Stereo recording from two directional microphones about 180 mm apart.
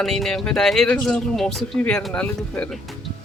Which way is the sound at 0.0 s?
Centre (ahead or behind).